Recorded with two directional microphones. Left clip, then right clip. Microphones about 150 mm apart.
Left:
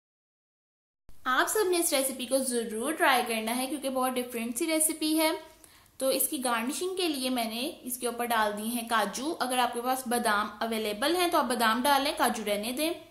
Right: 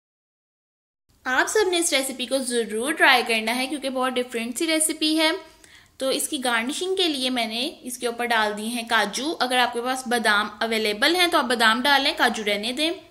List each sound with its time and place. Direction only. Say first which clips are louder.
1.2 s a woman's voice: right 5 dB; 5° right (ahead or behind)